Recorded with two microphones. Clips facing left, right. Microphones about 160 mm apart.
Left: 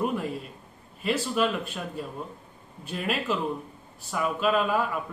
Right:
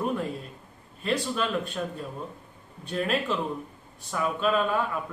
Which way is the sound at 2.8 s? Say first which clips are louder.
Right 3 dB; 5° left (ahead or behind).